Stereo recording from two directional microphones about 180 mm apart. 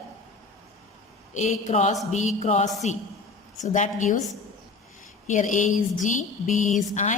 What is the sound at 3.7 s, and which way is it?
Speech, 45° left (ahead or behind).